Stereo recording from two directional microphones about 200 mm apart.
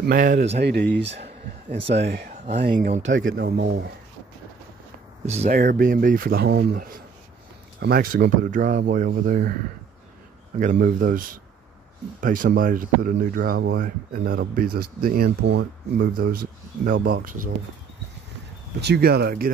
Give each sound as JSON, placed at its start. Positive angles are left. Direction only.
{"t": 0.0, "sound": "speech", "side_deg": -45}
{"t": 0.6, "sound": "speech", "side_deg": -55}
{"t": 1.9, "sound": "speech", "side_deg": -55}
{"t": 3.0, "sound": "speech", "side_deg": -70}
{"t": 5.2, "sound": "speech", "side_deg": -35}
{"t": 5.5, "sound": "speech", "side_deg": -45}
{"t": 10.6, "sound": "speech", "side_deg": -40}
{"t": 18.8, "sound": "speech", "side_deg": -55}